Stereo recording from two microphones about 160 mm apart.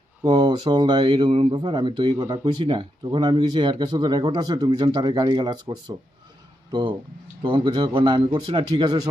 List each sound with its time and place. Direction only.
0.3 s speech: 25° right (ahead or behind)
2.4 s speech: 35° right (ahead or behind)